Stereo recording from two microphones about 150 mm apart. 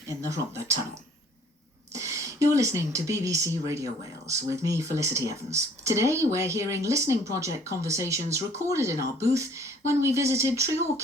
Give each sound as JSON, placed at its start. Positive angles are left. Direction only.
{"t": 1.9, "sound": "a woman's voice", "side_deg": -20}